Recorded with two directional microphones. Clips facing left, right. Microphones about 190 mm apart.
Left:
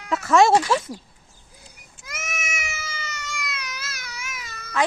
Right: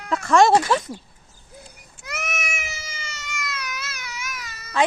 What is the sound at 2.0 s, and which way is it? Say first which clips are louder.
Goat: right 4 dB; 65° right (ahead or behind).